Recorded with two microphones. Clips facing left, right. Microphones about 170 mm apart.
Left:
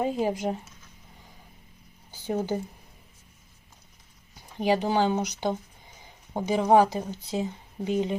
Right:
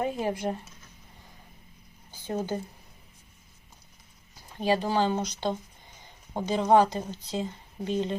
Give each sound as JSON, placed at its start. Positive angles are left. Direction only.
{"t": 0.0, "sound": "speech", "side_deg": 15}
{"t": 2.0, "sound": "speech", "side_deg": 10}
{"t": 4.5, "sound": "speech", "side_deg": 15}